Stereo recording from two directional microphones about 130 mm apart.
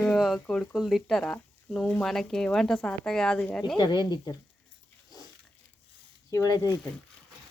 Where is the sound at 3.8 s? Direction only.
35° left (ahead or behind).